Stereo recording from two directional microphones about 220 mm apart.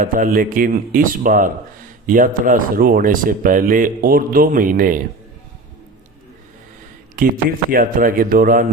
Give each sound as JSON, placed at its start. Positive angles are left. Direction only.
{"t": 0.0, "sound": "speech", "side_deg": -40}
{"t": 7.2, "sound": "speech", "side_deg": -40}